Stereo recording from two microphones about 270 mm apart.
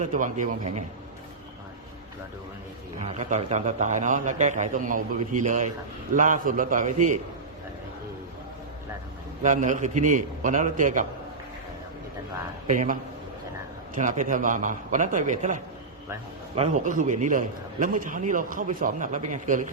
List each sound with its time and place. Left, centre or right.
0.0 s a man's voice: right
3.0 s a man's voice: right
9.4 s a man's voice: right
12.6 s a man's voice: right